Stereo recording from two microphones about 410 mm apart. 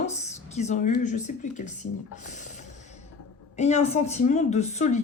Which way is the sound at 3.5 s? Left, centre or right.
Centre.